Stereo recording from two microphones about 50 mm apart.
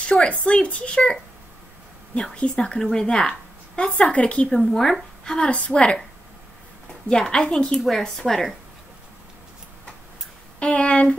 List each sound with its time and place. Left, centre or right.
0.3 s a woman's voice: left
4.5 s a woman's voice: centre
5.2 s a woman's voice: centre
7.1 s a woman's voice: centre
7.7 s a woman's voice: centre
10.6 s a woman's voice: left